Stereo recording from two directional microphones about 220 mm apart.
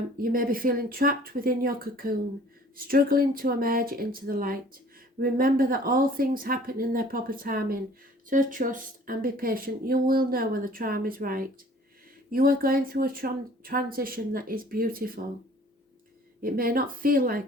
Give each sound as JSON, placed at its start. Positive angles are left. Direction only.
{"t": 0.2, "sound": "speech", "side_deg": -40}
{"t": 16.4, "sound": "speech", "side_deg": -40}